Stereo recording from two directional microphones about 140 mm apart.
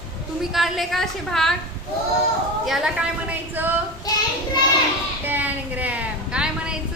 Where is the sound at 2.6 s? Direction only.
Centre (ahead or behind).